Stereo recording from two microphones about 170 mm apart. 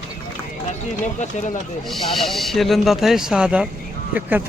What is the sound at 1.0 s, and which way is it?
Speech, 45° left (ahead or behind).